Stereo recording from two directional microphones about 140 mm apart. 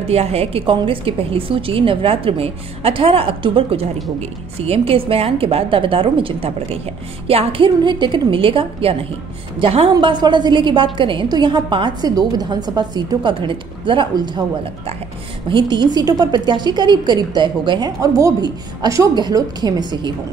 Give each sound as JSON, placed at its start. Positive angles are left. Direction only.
{"t": 0.1, "sound": "a woman's voice", "side_deg": -45}
{"t": 9.9, "sound": "a woman's voice", "side_deg": -30}
{"t": 15.5, "sound": "a woman's voice", "side_deg": -35}